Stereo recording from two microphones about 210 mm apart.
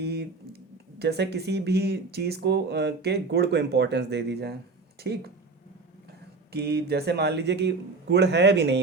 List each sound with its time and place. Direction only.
0.0 s a sound: 50° right (ahead or behind)
0.9 s speech: 55° right (ahead or behind)
6.5 s speech: 50° right (ahead or behind)